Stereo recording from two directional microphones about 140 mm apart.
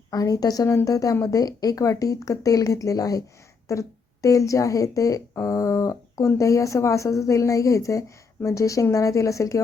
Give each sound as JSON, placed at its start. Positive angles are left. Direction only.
{"t": 0.1, "sound": "a woman's voice", "side_deg": 25}